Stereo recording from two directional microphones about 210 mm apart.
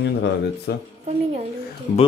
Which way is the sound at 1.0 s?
30° right (ahead or behind).